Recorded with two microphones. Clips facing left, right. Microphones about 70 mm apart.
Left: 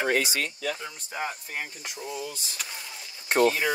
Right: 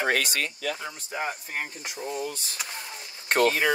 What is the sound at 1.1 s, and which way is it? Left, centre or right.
Speech, right.